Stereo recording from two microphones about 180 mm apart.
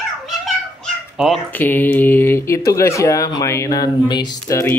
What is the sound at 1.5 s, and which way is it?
Speech, 10° left (ahead or behind).